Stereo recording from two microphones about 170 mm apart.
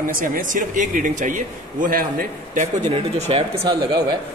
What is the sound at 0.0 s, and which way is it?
Speech, 55° right (ahead or behind).